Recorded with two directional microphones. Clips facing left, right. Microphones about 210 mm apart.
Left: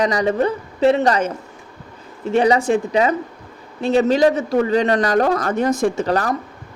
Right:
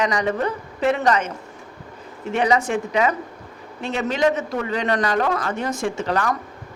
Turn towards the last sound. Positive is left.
turn(degrees=40)  # may be behind; listen again after turning